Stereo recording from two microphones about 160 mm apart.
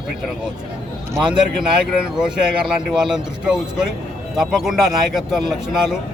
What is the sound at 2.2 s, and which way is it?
A man's voice, 5° right (ahead or behind).